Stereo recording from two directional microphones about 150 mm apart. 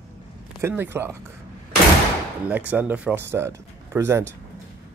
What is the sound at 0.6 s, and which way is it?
Speech, 15° right (ahead or behind).